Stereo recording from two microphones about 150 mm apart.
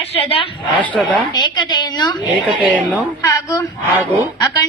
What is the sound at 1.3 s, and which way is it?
Speech, 30° left (ahead or behind).